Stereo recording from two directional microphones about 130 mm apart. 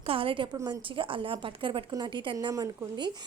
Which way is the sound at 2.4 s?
25° right (ahead or behind).